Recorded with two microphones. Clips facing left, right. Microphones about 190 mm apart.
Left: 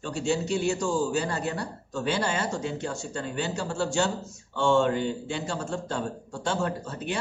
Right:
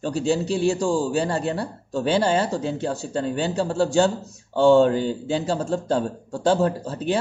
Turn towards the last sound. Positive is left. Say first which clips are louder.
# right 7 dB
turn(degrees=-35)  # may be behind; listen again after turning